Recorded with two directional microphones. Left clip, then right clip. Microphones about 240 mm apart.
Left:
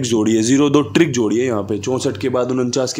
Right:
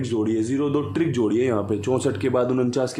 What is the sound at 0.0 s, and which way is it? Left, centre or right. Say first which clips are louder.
A man's voice: left 7 dB; left.